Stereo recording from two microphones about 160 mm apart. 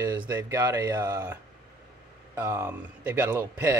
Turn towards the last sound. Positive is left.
turn(degrees=-10)  # may be behind; listen again after turning